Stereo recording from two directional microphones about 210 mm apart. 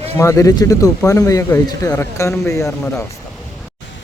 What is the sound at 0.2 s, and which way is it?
Speech, 15° left (ahead or behind).